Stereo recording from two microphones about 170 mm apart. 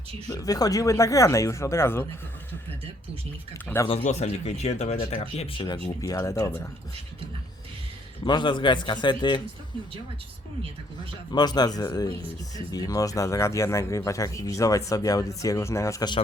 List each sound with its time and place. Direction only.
0.3 s speech: 20° left (ahead or behind)
3.8 s speech: 40° left (ahead or behind); by 6.7 s 15° left (ahead or behind)
8.2 s speech: 25° left (ahead or behind)
11.3 s speech: 25° left (ahead or behind)